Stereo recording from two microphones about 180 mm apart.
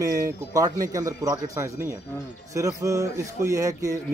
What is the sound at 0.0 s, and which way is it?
Speech, 20° right (ahead or behind).